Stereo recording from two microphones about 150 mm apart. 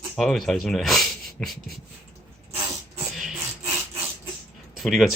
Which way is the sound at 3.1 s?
5° right (ahead or behind).